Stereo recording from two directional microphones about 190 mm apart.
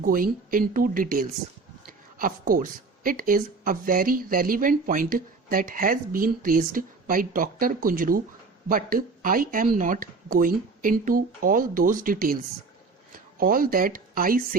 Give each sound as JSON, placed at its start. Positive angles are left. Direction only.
{"t": 0.0, "sound": "speech", "side_deg": -50}